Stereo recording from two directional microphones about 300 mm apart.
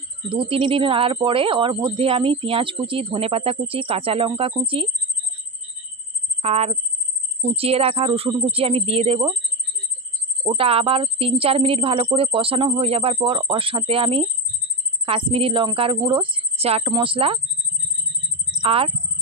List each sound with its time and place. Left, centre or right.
0.3 s speech: centre
6.4 s speech: right
10.4 s speech: centre
18.6 s speech: centre